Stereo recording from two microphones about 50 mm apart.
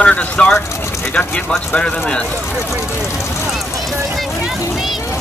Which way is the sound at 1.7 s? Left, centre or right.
Centre.